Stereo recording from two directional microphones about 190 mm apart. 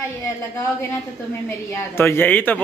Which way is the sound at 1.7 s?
15° left (ahead or behind).